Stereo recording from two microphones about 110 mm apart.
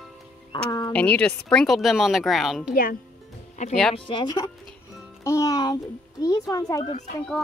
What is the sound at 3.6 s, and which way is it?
Speech, 90° left.